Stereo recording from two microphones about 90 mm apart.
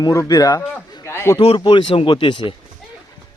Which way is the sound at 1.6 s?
75° left (ahead or behind).